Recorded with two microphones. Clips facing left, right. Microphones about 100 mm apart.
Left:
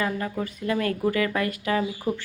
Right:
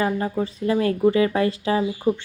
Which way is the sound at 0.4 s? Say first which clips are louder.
Right 4 dB; 25° right (ahead or behind).